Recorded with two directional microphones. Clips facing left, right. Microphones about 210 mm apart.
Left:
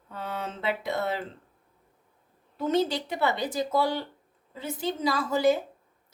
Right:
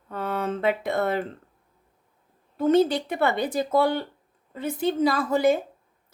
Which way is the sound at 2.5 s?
55° right (ahead or behind).